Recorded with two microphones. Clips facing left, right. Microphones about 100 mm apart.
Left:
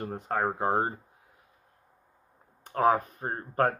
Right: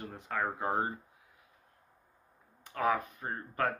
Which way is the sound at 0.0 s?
45° left (ahead or behind).